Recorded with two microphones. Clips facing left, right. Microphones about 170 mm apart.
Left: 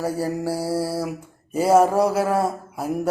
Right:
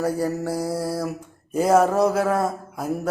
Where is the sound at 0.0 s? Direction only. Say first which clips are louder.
Right 1 dB; 5° left (ahead or behind).